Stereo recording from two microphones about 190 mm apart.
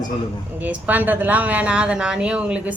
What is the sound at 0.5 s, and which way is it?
A woman's voice, 10° right (ahead or behind).